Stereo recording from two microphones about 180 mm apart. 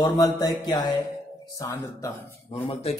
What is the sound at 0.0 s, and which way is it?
Speech, 20° left (ahead or behind).